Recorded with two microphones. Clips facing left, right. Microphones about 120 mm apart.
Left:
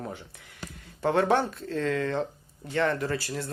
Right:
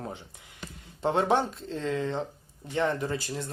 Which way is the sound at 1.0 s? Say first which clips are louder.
Left 1 dB; 20° right (ahead or behind).